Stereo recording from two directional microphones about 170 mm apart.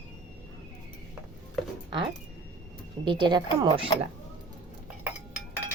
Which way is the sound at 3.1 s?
30° right (ahead or behind).